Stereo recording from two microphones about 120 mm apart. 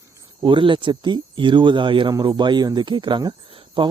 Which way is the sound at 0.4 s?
45° right (ahead or behind).